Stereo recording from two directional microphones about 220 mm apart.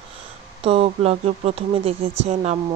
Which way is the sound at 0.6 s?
25° right (ahead or behind).